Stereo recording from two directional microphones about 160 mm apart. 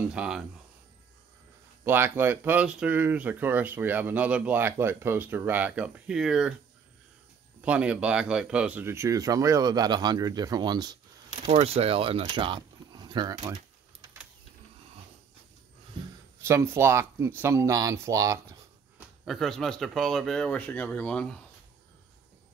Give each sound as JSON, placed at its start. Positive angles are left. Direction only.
{"t": 0.1, "sound": "speech", "side_deg": -5}
{"t": 1.9, "sound": "speech", "side_deg": -15}
{"t": 7.6, "sound": "speech", "side_deg": -10}
{"t": 11.4, "sound": "speech", "side_deg": -35}
{"t": 16.3, "sound": "speech", "side_deg": -15}
{"t": 19.2, "sound": "speech", "side_deg": 0}